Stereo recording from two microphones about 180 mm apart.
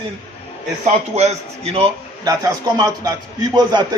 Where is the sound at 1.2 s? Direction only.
35° right (ahead or behind).